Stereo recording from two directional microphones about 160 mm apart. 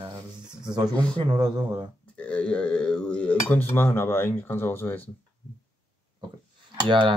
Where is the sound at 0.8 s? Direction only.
25° right (ahead or behind).